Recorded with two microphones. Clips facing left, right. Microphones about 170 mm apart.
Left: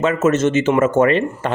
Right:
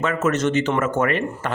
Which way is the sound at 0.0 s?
25° left (ahead or behind).